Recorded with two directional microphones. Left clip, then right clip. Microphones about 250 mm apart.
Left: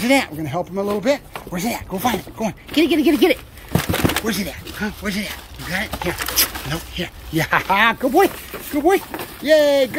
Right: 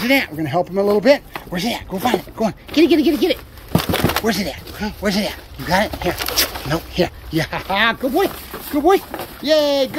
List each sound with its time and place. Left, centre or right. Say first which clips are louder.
0.0 s speech: even; centre
0.4 s speech: right 5 dB; centre
3.7 s a sound: right 2 dB; right
4.2 s speech: right 4 dB; centre